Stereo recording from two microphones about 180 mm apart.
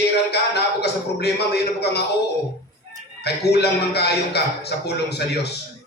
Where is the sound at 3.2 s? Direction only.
65° left (ahead or behind).